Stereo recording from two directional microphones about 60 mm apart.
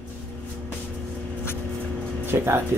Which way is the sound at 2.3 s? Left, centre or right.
Right.